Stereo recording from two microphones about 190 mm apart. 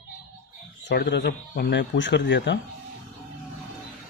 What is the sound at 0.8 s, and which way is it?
Speech, 65° left (ahead or behind).